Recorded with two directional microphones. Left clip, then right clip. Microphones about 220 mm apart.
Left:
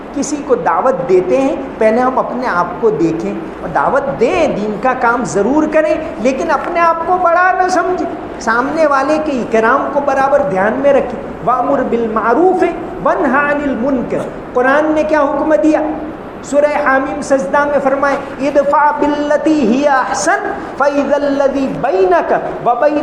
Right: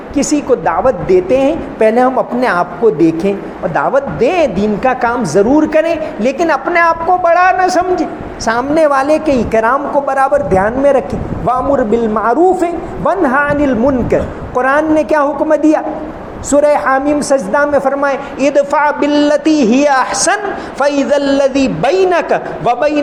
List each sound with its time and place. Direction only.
0.2 s a woman's voice: 50° right (ahead or behind)